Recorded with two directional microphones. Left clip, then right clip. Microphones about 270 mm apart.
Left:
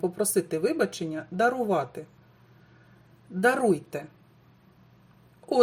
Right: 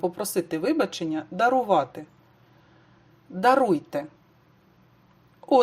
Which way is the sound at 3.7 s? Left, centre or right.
Centre.